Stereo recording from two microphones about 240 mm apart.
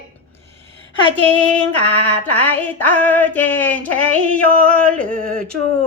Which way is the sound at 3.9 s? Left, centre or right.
Centre.